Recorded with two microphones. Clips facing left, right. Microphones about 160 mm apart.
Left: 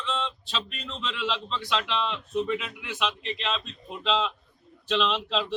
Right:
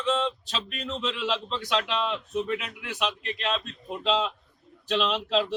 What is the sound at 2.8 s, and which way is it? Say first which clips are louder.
Speech: even; 50° right (ahead or behind).